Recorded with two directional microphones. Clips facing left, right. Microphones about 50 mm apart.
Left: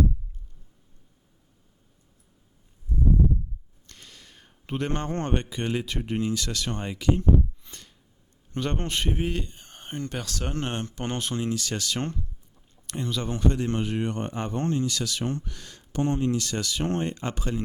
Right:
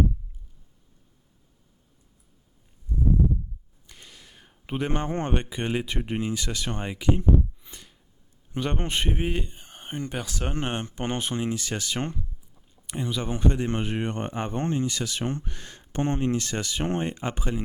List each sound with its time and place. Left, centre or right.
3.8 s a man's voice: centre